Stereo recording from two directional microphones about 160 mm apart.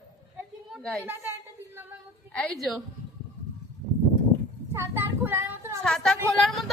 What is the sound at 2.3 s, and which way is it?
Female singing, 5° left (ahead or behind).